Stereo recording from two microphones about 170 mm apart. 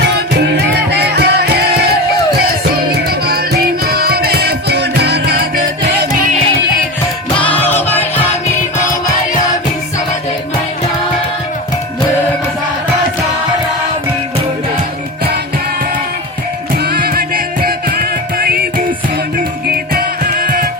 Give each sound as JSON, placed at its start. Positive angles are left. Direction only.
{"t": 0.5, "sound": "music", "side_deg": -75}
{"t": 7.4, "sound": "music", "side_deg": 10}
{"t": 16.7, "sound": "music", "side_deg": -60}
{"t": 19.9, "sound": "music", "side_deg": -60}